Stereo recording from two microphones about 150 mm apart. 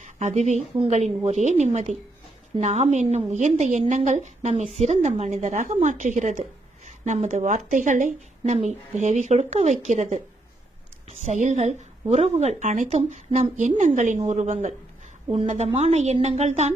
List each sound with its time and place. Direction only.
0.0 s a woman's voice: 50° right (ahead or behind)
11.3 s a woman's voice: 55° right (ahead or behind)